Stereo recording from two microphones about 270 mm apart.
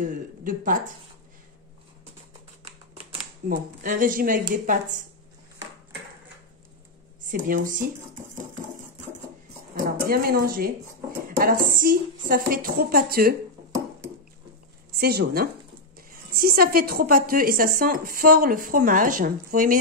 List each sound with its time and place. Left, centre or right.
0.0 s speech: right
3.4 s speech: right
7.2 s speech: right
9.8 s a woman's voice: right
13.7 s a sound: centre
15.0 s a woman's voice: right